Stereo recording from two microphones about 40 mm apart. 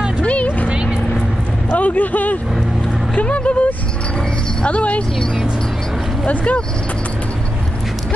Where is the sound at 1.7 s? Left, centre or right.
Left.